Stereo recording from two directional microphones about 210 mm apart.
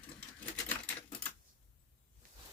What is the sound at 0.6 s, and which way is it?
Typewriter, 5° left (ahead or behind).